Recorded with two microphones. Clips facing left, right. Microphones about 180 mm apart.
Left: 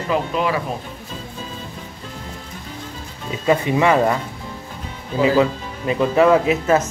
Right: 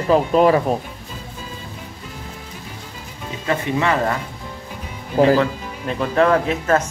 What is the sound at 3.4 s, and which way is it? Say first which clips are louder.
Speech: left 4 dB; 15° left (ahead or behind).